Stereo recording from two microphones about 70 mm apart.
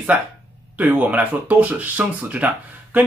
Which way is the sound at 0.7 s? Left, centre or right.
Right.